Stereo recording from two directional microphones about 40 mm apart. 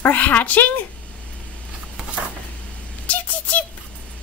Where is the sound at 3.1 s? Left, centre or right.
Left.